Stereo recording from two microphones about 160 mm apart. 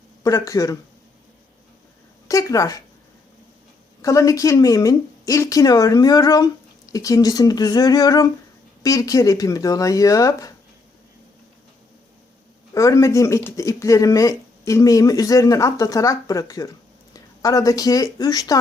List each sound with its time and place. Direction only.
0.2 s speech: 20° left (ahead or behind)
2.2 s speech: 20° left (ahead or behind)
4.0 s speech: 20° left (ahead or behind)
12.7 s speech: 20° left (ahead or behind)